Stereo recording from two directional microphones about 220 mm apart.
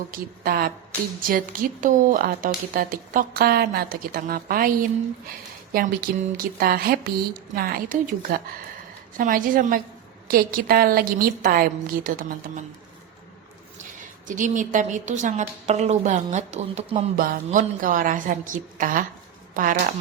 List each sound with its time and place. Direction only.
0.1 s a woman's voice: 40° right (ahead or behind)
14.3 s a woman's voice: 35° right (ahead or behind)